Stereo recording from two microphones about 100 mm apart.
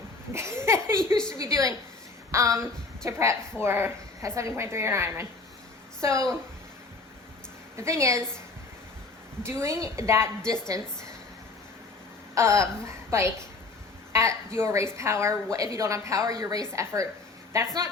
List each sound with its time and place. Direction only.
0.3 s a woman's voice: 30° right (ahead or behind)
1.1 s a woman's voice: 5° left (ahead or behind)
1.4 s a woman's voice: 30° right (ahead or behind)
7.8 s a woman's voice: 30° right (ahead or behind)
9.4 s a woman's voice: 25° right (ahead or behind)
12.3 s a woman's voice: 30° right (ahead or behind)